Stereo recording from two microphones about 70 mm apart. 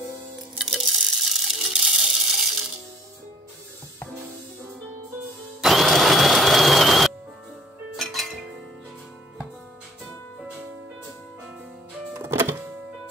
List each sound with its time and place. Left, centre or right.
0.6 s coin: centre
5.6 s music: centre
12.2 s music: right